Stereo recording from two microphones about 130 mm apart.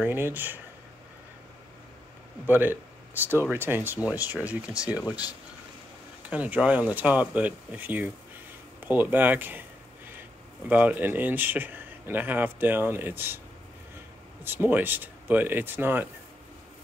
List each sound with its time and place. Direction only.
0.0 s speech: 15° right (ahead or behind)
2.4 s speech: 15° right (ahead or behind)
6.3 s speech: 10° right (ahead or behind)
8.8 s a sound: 15° right (ahead or behind)
10.7 s speech: 10° right (ahead or behind)
14.4 s speech: 15° right (ahead or behind)